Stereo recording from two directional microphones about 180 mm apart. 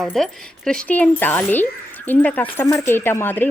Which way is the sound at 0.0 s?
5° left (ahead or behind).